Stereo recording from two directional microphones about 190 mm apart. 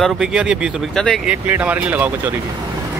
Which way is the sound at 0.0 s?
5° right (ahead or behind).